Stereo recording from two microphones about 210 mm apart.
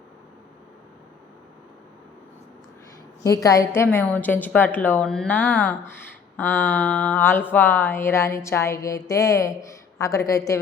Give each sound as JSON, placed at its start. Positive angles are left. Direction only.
{"t": 3.2, "sound": "a woman's voice", "side_deg": 15}